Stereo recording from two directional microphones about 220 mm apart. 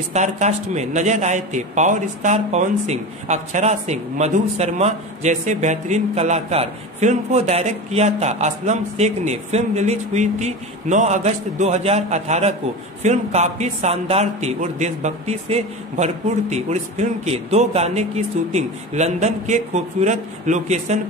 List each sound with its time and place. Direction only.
0.1 s a man's voice: 30° right (ahead or behind)